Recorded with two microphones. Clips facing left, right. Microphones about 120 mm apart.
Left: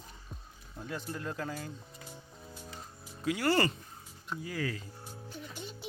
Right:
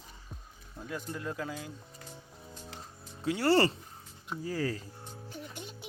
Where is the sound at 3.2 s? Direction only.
30° right (ahead or behind).